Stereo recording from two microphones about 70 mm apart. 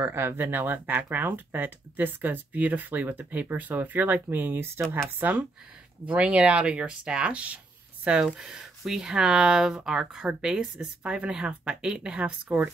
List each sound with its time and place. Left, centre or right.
0.0 s speech: right
6.0 s speech: centre